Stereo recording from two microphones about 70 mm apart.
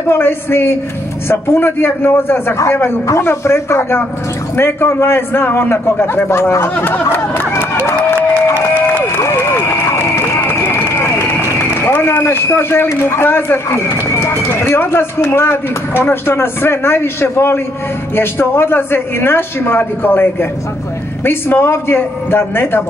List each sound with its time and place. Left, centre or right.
0.1 s a man's voice: left
9.2 s run: left
12.1 s a man's voice: left